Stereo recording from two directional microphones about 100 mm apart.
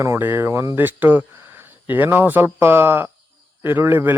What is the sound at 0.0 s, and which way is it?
Speech, 25° right (ahead or behind).